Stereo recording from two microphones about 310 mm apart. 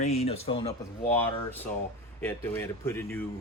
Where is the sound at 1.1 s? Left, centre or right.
Centre.